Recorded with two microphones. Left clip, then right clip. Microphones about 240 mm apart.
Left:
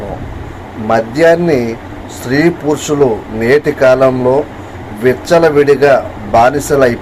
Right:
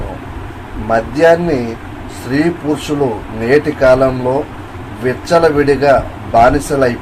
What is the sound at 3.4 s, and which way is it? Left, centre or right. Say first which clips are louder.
Speech: left 1 dB; centre.